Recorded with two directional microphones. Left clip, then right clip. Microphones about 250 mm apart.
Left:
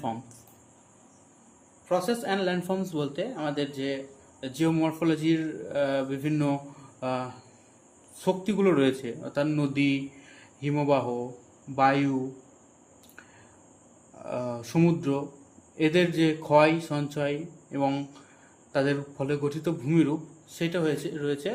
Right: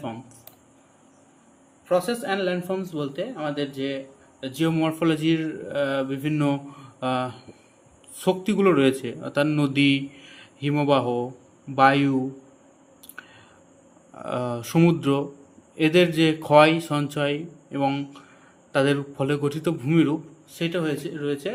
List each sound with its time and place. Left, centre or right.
1.9 s a man's voice: centre
13.2 s whispering: centre
14.3 s a man's voice: centre